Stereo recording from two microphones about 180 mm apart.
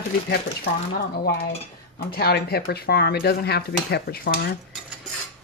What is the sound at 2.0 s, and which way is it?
Speech, 60° left (ahead or behind).